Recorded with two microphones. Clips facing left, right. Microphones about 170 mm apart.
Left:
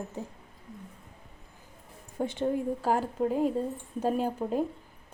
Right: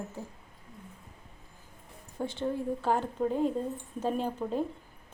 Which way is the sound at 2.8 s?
5° left (ahead or behind).